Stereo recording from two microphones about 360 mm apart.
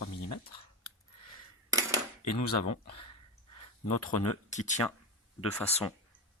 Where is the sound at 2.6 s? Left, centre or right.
Left.